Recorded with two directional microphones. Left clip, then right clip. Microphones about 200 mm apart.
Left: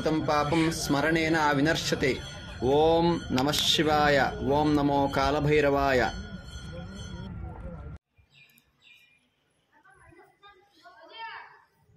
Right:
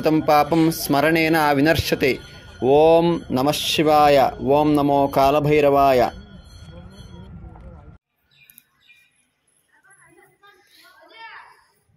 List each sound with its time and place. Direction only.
0.0 s speech: 45° right (ahead or behind)
2.6 s speech: 35° right (ahead or behind)
10.7 s a sound: 15° right (ahead or behind)